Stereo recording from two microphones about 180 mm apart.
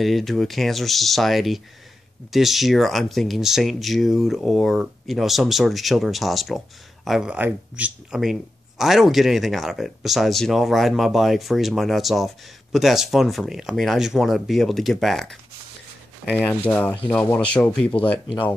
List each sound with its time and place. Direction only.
0.0 s speech: centre (ahead or behind)
17.9 s speech: 30° left (ahead or behind)